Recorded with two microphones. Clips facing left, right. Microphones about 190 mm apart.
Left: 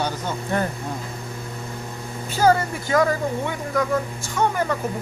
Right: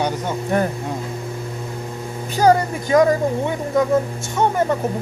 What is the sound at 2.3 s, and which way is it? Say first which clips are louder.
Speech: right 3 dB; 15° right (ahead or behind).